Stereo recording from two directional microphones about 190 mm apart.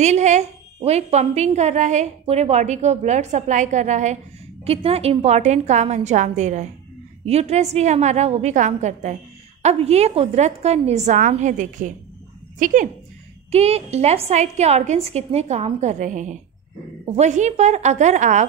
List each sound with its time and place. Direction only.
0.0 s a woman's voice: 35° right (ahead or behind)
13.5 s a woman's voice: 35° right (ahead or behind)